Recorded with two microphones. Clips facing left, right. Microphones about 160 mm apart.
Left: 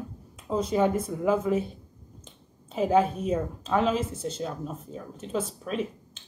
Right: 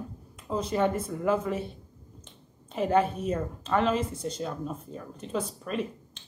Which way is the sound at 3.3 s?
10° left (ahead or behind).